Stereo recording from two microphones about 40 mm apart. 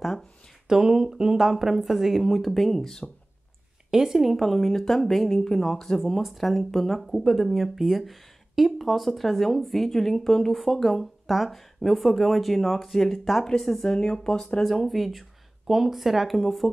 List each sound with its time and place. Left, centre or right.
0.7 s speech: centre
3.9 s speech: centre
6.2 s speech: centre
13.8 s speech: centre
16.3 s speech: centre